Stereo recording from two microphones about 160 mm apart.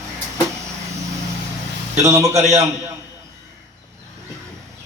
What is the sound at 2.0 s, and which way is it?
Speech, 20° right (ahead or behind).